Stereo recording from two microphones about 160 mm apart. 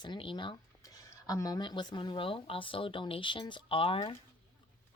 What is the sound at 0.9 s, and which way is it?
Speech, 20° left (ahead or behind).